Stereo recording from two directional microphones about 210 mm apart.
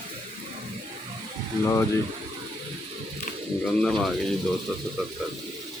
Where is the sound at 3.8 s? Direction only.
5° left (ahead or behind).